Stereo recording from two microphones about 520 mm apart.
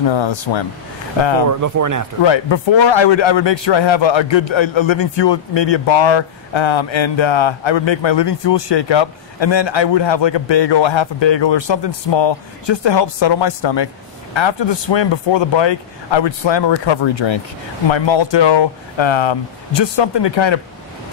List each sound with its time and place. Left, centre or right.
0.1 s a man's voice: left
1.5 s speech: right
2.2 s a man's voice: left